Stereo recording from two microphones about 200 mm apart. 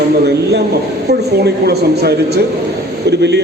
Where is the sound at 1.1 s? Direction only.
55° right (ahead or behind).